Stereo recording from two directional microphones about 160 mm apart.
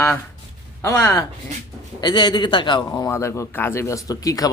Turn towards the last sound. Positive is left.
turn(degrees=20)  # may be behind; listen again after turning